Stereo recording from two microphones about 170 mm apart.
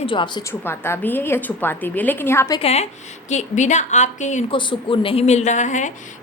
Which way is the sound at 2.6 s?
40° left (ahead or behind).